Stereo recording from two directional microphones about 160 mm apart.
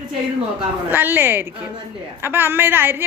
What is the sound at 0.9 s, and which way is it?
Speech, 10° right (ahead or behind).